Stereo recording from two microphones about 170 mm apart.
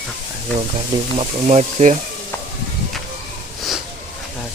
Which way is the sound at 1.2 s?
40° right (ahead or behind).